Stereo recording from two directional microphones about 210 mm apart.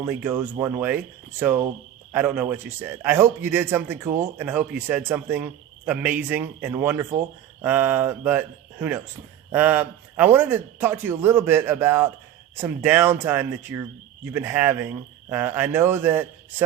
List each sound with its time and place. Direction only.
0.0 s a man's voice: 10° right (ahead or behind)